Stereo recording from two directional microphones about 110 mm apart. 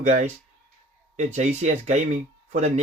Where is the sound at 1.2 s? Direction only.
90° right.